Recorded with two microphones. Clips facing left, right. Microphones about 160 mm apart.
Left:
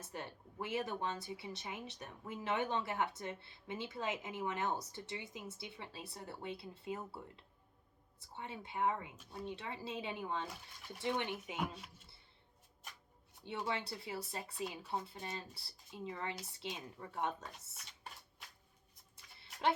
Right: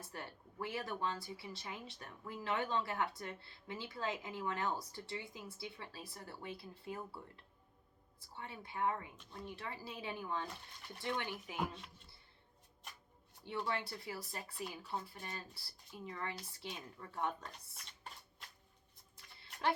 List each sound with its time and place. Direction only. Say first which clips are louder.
0.0 s speech: left 2 dB; 20° left (ahead or behind)
9.1 s speech: left 3 dB; 5° left (ahead or behind)
9.5 s speech: left 3 dB; 25° left (ahead or behind)
10.5 s speech: left 1 dB; 5° left (ahead or behind)
11.0 s speech: left 3 dB; 20° left (ahead or behind)
13.4 s speech: even; 20° left (ahead or behind)
17.4 s a sound: left 1 dB; 5° left (ahead or behind)
19.1 s a sound: even; 20° left (ahead or behind)